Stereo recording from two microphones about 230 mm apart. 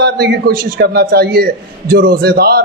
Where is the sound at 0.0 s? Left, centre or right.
Right.